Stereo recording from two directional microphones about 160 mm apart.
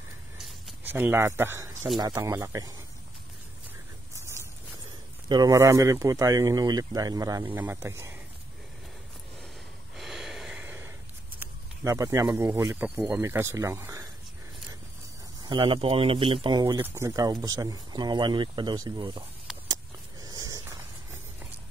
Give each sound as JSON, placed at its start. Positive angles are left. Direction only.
{"t": 0.8, "sound": "speech", "side_deg": -10}
{"t": 5.3, "sound": "speech", "side_deg": -20}
{"t": 9.9, "sound": "snort", "side_deg": 0}
{"t": 11.3, "sound": "speech", "side_deg": -20}
{"t": 15.4, "sound": "speech", "side_deg": -30}
{"t": 19.7, "sound": "a sound", "side_deg": -25}